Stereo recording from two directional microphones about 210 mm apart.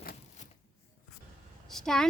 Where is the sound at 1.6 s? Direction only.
Centre (ahead or behind).